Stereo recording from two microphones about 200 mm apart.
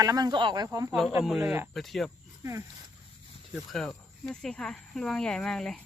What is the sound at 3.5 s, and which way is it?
Speech, centre (ahead or behind).